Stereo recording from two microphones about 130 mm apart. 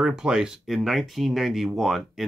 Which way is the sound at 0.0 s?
5° right (ahead or behind).